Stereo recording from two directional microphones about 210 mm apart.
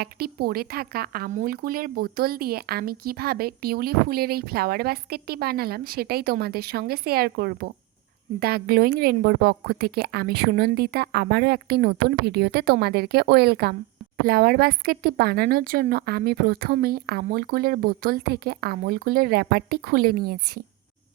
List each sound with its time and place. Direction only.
0.0 s speech: 45° right (ahead or behind)